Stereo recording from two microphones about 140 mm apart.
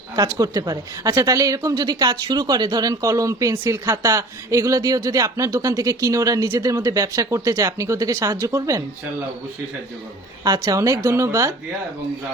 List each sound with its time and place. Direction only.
0.3 s a woman's voice: 25° right (ahead or behind)
10.4 s a woman's voice: 30° right (ahead or behind)